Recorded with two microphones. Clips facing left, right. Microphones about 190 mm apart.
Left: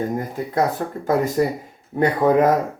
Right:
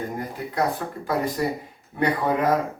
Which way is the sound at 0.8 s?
35° left (ahead or behind).